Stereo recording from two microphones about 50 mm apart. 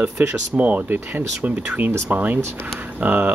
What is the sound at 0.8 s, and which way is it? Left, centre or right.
Speech, right.